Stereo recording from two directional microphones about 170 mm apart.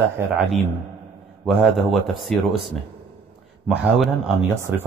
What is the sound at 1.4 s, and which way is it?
A man's voice, centre (ahead or behind).